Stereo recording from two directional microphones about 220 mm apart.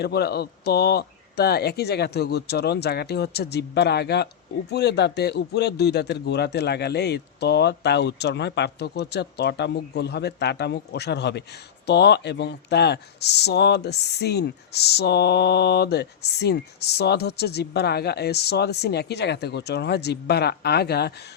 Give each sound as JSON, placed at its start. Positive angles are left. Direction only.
{"t": 0.0, "sound": "speech", "side_deg": 45}